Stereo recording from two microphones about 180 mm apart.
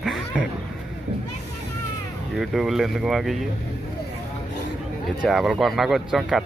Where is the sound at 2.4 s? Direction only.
Centre (ahead or behind).